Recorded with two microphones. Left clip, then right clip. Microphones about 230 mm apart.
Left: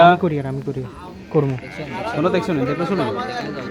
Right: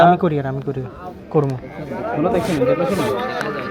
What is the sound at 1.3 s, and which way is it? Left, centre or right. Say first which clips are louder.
Speech: right 1 dB; centre.